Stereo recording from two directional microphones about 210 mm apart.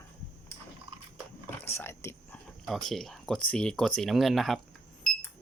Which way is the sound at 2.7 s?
Centre (ahead or behind).